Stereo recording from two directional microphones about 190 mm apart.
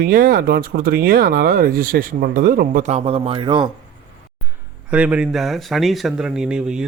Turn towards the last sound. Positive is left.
turn(degrees=-5)  # may be behind; listen again after turning